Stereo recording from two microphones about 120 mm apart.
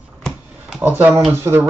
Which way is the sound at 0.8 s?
15° right (ahead or behind).